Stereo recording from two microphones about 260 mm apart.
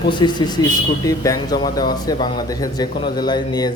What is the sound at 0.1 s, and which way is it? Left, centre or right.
A man's voice, centre.